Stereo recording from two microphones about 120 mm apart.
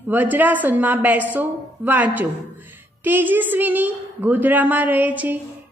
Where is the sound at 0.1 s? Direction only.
15° right (ahead or behind).